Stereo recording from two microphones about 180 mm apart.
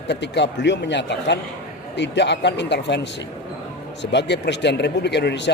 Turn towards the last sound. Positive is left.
turn(degrees=70)  # may be behind; listen again after turning